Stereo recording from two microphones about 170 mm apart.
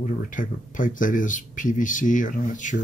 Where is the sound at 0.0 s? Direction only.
50° left (ahead or behind).